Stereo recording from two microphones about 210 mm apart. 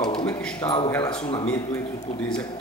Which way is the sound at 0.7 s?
15° left (ahead or behind).